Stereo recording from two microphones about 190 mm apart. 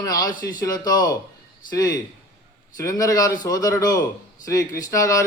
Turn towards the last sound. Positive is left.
turn(degrees=15)  # may be behind; listen again after turning